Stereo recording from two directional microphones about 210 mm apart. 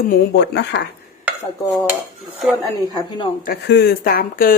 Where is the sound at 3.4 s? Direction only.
50° left (ahead or behind).